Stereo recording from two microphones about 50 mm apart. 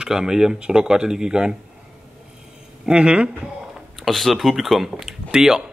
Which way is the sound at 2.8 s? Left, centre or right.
Right.